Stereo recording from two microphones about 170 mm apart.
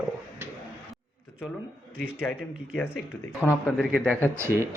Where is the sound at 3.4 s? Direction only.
10° left (ahead or behind).